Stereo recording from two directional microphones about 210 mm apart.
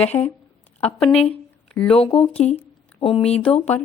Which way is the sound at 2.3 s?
30° left (ahead or behind).